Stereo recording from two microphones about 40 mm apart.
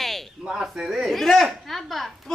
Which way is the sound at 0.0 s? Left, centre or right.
Centre.